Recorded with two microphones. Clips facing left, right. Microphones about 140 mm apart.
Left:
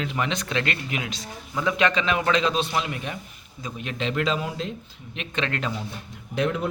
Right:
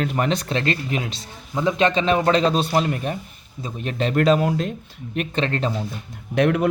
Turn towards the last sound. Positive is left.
turn(degrees=-65)  # may be behind; listen again after turning